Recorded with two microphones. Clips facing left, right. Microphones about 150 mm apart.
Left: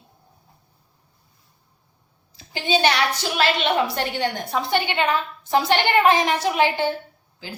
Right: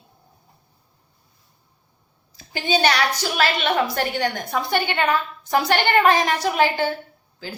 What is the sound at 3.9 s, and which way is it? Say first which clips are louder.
A woman's voice: right 1 dB; 25° left (ahead or behind).